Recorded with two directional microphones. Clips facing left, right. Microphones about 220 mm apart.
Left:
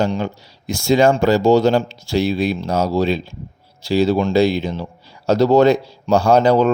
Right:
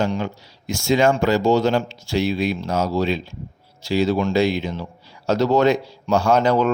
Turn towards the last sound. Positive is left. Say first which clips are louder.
# left 4 dB
turn(degrees=35)  # may be behind; listen again after turning